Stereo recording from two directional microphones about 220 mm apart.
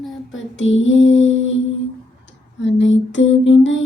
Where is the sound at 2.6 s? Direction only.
55° left (ahead or behind).